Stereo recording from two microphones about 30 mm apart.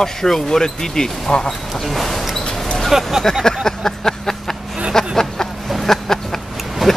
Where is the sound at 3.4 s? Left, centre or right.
Centre.